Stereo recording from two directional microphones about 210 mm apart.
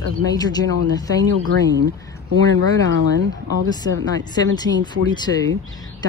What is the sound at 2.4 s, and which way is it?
Speech, 20° left (ahead or behind).